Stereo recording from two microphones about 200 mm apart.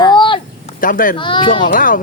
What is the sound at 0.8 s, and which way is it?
Speech, 45° left (ahead or behind).